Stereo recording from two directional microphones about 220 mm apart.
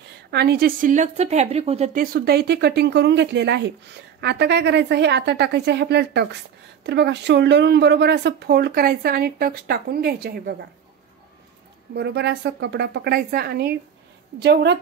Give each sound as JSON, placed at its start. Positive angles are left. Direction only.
{"t": 0.3, "sound": "a woman's voice", "side_deg": -45}
{"t": 2.0, "sound": "speech", "side_deg": -45}
{"t": 11.9, "sound": "speech", "side_deg": -50}